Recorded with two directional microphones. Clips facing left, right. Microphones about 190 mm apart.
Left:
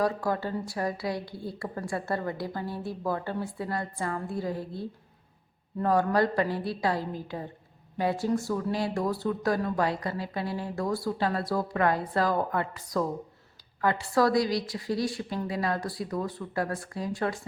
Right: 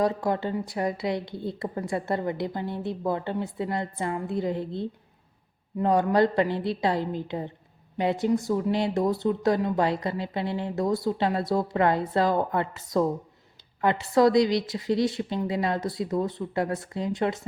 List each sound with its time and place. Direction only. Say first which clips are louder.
0.0 s speech: right 3 dB; 20° right (ahead or behind)